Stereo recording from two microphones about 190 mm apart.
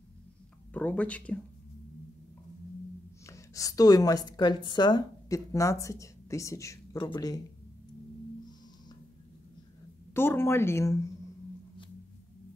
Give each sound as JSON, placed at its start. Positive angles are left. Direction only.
{"t": 0.7, "sound": "speech", "side_deg": 5}
{"t": 3.3, "sound": "a woman's voice", "side_deg": 15}
{"t": 10.1, "sound": "speech", "side_deg": 10}